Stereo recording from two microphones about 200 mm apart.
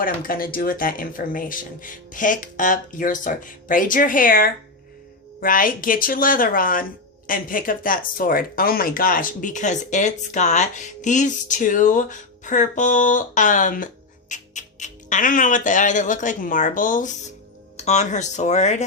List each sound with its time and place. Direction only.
0.0 s speech: 45° left (ahead or behind)